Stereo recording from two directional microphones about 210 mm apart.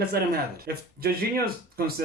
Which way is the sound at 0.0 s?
45° right (ahead or behind).